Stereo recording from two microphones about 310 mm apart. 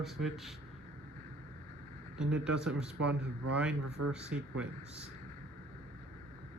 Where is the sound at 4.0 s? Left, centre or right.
Right.